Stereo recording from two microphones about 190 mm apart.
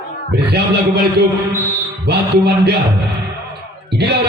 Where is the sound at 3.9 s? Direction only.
60° right (ahead or behind).